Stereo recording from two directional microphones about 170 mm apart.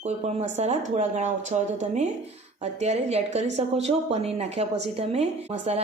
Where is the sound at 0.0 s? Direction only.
40° right (ahead or behind).